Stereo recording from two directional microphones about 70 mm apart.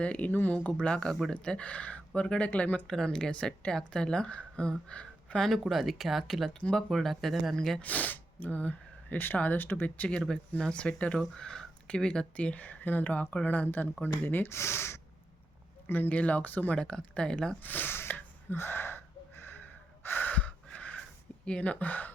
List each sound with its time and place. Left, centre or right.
0.0 s speech: left
2.8 s speech: centre
7.8 s speech: left
11.2 s speech: centre; by 15.0 s left
15.9 s speech: left
17.6 s sneeze: left
21.4 s speech: centre